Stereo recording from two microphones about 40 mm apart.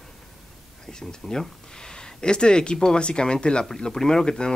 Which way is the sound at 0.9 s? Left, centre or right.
Centre.